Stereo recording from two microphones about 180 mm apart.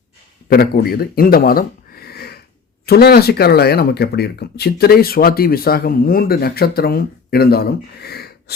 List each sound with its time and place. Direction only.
0.5 s speech: 55° left (ahead or behind)